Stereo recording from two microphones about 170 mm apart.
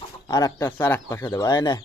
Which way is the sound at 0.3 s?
20° left (ahead or behind).